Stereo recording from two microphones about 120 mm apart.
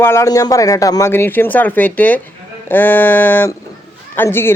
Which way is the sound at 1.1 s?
20° left (ahead or behind).